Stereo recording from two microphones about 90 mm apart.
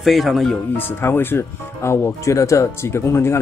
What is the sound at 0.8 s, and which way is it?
Speech, 25° left (ahead or behind).